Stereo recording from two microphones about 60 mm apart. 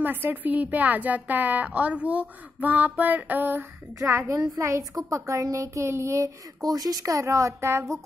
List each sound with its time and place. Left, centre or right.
0.0 s a woman's voice: right
4.1 s a child's voice: right